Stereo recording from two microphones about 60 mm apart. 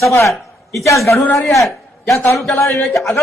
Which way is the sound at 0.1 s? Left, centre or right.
Left.